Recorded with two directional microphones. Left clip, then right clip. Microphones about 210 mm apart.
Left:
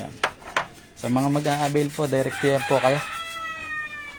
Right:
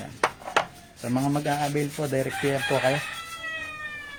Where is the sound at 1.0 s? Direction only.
15° left (ahead or behind).